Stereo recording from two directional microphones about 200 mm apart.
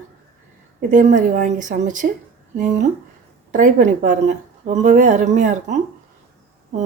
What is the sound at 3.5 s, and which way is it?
Speech, 40° right (ahead or behind).